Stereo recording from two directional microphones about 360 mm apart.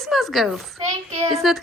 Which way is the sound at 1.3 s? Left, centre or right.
Centre.